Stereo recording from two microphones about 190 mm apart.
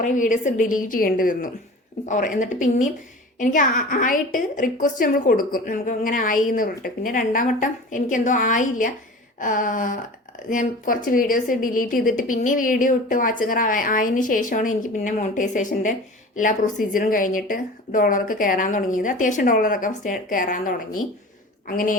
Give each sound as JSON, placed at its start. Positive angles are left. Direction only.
{"t": 0.0, "sound": "a woman's voice", "side_deg": 40}